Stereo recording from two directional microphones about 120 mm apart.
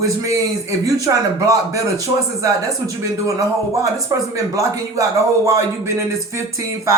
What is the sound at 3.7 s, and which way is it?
Speech, 25° right (ahead or behind).